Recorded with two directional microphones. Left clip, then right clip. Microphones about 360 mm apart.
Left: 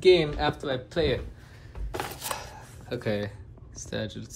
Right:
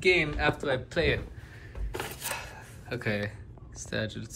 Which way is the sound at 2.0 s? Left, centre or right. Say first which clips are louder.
Left 2 dB; centre.